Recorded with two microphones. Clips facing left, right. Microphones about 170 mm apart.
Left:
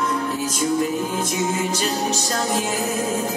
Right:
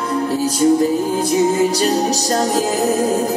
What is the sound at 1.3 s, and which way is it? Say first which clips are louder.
Music: right 8 dB; 35° right (ahead or behind).